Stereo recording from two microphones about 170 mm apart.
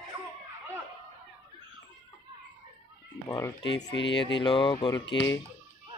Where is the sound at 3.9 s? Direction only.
90° left.